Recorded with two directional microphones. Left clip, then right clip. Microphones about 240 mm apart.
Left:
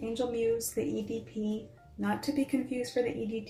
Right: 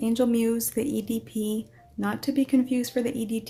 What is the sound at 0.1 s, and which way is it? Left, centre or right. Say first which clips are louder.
Speech: right 4 dB; right.